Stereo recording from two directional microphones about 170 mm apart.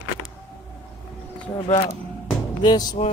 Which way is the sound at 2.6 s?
25° left (ahead or behind).